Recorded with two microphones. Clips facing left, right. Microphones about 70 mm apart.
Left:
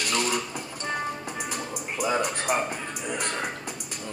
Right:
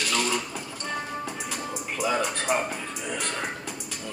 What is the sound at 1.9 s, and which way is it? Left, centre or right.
Speech, centre.